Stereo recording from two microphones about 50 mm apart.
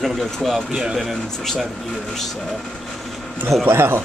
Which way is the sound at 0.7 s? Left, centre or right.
Centre.